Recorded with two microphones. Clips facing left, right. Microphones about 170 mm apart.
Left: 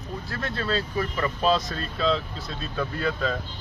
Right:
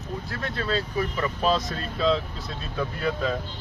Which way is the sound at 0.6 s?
10° right (ahead or behind).